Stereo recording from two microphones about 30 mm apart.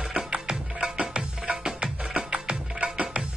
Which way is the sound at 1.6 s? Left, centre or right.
Right.